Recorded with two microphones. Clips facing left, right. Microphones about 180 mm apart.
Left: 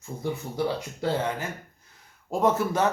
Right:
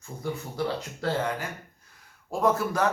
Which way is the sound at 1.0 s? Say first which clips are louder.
Left 1 dB; 20° left (ahead or behind).